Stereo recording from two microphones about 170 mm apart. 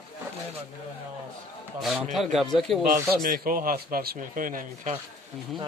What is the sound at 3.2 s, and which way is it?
Speech, 55° right (ahead or behind).